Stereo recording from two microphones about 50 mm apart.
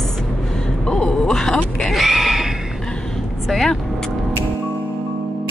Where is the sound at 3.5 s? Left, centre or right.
Centre.